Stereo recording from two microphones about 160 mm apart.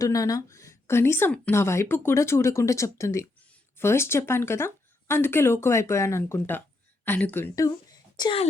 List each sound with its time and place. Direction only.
0.0 s a woman's voice: 20° left (ahead or behind)